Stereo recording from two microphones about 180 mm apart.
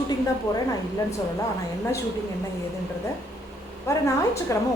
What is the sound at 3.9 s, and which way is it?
Speech, 15° left (ahead or behind).